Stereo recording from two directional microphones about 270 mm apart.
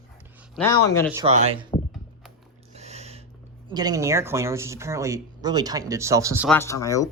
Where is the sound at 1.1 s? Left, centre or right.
Right.